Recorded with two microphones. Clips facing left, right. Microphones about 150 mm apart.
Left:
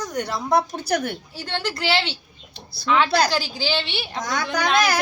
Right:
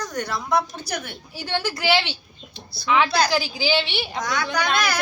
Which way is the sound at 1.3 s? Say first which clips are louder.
Right 6 dB; 5° right (ahead or behind).